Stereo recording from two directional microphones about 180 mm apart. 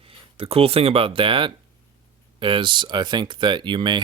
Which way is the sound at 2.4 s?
30° right (ahead or behind).